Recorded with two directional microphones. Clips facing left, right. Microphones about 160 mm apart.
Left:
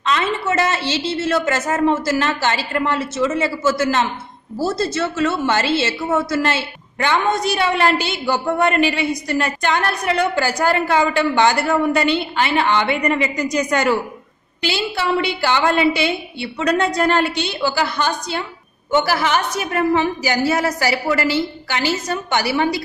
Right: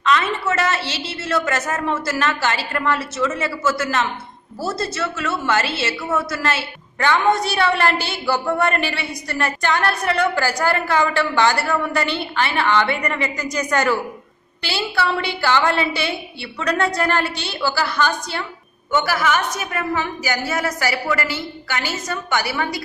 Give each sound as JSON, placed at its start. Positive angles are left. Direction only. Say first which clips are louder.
{"t": 0.0, "sound": "a woman's voice", "louder": "even", "side_deg": 25}